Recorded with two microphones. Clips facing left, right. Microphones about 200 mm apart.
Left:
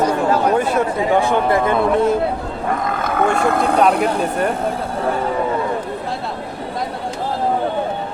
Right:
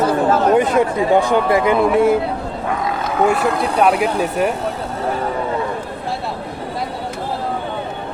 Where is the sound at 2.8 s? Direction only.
55° left (ahead or behind).